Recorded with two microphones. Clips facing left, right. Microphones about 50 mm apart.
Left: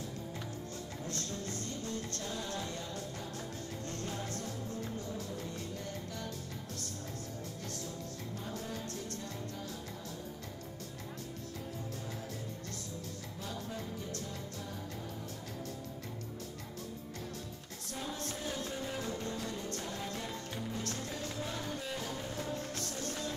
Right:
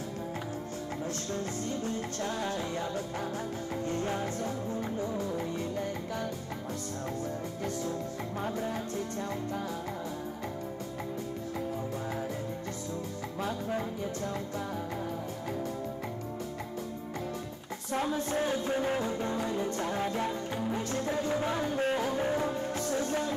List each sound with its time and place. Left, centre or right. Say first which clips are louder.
1.9 s music: right 6 dB; right
2.2 s music: right 10 dB; right
3.8 s music: right 9 dB; right
13.4 s music: right 10 dB; right
18.3 s music: right 10 dB; right
18.9 s music: right 7 dB; right
19.8 s music: right 9 dB; right
20.5 s music: right 8 dB; right
22.6 s music: right 9 dB; centre